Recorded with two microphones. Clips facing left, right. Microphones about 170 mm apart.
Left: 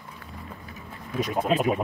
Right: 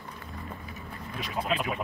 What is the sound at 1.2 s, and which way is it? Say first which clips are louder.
Speech: left 7 dB; 45° left (ahead or behind).